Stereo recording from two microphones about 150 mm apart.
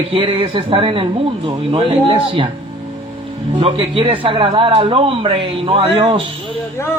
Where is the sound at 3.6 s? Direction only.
35° right (ahead or behind).